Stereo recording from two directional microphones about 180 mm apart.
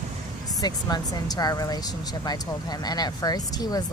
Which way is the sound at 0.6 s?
20° left (ahead or behind).